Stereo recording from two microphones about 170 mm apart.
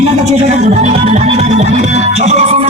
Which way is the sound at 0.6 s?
40° right (ahead or behind).